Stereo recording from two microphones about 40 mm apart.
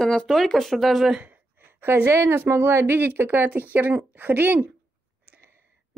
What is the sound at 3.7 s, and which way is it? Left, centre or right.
Speech, right.